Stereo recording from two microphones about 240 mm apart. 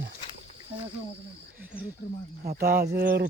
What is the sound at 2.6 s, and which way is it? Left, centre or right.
Speech, right.